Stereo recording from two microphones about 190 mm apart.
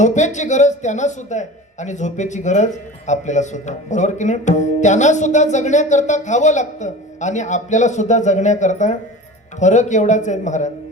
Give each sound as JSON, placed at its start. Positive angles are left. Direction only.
{"t": 0.0, "sound": "speech", "side_deg": 40}